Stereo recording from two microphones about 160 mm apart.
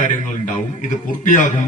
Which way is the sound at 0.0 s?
55° left (ahead or behind).